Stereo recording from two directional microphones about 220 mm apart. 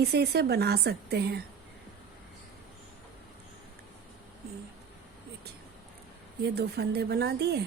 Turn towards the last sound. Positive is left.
turn(degrees=-50)  # may be behind; listen again after turning